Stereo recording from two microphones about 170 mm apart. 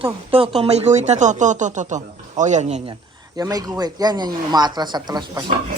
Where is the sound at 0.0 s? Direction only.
30° right (ahead or behind).